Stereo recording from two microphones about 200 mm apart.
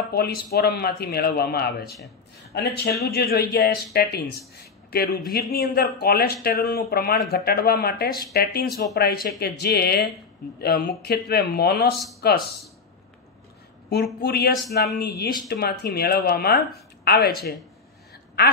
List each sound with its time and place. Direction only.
0.1 s speech: 50° left (ahead or behind)
13.9 s speech: 55° left (ahead or behind)